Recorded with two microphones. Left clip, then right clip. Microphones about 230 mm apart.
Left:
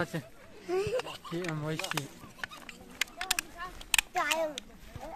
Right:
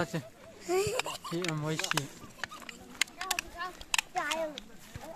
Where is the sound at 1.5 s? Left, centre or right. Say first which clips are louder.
Right 1 dB; centre.